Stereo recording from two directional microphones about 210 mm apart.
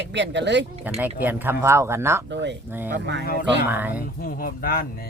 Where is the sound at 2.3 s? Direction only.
55° right (ahead or behind).